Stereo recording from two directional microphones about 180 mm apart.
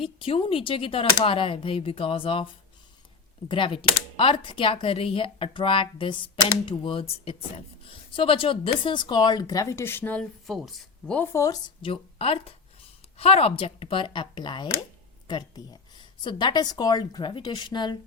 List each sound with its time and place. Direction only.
0.0 s speech: 30° left (ahead or behind)